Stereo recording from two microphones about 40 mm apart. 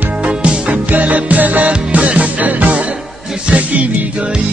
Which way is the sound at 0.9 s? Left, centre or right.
Right.